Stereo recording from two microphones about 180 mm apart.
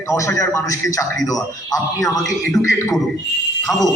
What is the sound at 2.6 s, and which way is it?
Speech, centre (ahead or behind).